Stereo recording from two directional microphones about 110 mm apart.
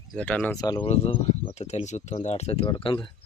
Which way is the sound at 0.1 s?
10° left (ahead or behind).